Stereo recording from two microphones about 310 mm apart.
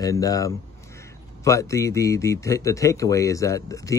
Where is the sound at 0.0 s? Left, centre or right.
Centre.